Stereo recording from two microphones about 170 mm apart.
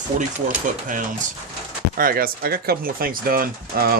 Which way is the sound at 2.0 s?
60° right (ahead or behind).